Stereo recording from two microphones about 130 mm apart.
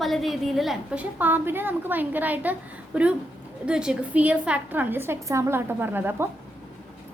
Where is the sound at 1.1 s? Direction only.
15° right (ahead or behind).